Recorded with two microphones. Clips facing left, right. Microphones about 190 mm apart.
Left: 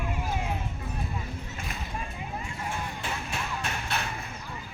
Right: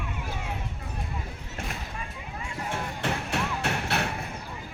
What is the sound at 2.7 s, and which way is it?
Music, 70° right (ahead or behind).